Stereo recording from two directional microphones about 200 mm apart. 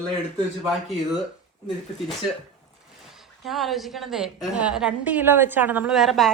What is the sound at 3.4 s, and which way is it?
A woman's voice, centre (ahead or behind).